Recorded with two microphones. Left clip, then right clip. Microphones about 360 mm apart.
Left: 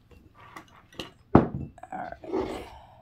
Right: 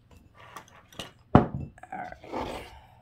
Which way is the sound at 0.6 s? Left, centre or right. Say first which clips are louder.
Left 1 dB; centre.